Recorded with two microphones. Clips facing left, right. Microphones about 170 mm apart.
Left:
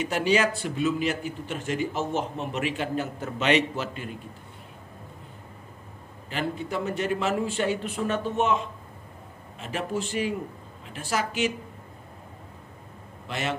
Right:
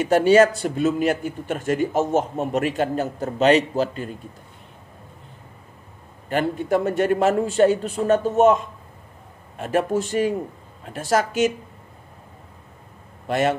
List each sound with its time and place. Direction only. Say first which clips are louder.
0.0 s a man's voice: right 9 dB; 45° right (ahead or behind)
6.2 s a man's voice: right 7 dB; 50° right (ahead or behind)
13.3 s a man's voice: right 10 dB; 50° right (ahead or behind)